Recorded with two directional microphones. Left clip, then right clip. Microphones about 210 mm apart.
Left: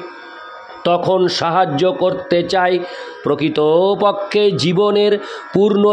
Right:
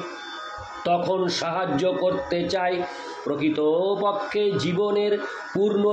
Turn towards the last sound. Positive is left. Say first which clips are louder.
# left 8 dB
turn(degrees=50)  # may be behind; listen again after turning